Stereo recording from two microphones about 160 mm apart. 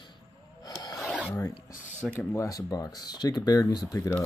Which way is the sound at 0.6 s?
25° left (ahead or behind).